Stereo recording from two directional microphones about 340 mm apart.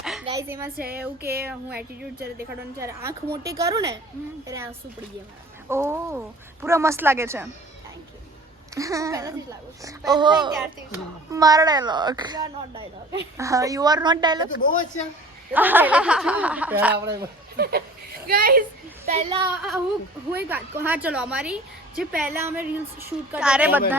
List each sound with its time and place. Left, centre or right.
0.0 s a sound: centre
0.3 s a woman's voice: centre
0.8 s speech: right
2.7 s a woman's voice: centre
8.7 s a woman's voice: centre
10.5 s a woman's voice: centre
14.5 s speech: left
15.5 s a woman's voice: centre
17.6 s a woman's voice: right
20.5 s a woman's voice: centre